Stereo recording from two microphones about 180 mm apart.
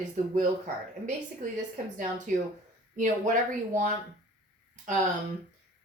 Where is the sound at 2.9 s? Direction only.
45° right (ahead or behind).